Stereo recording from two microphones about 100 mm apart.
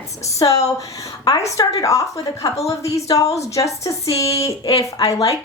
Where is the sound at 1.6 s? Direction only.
35° left (ahead or behind).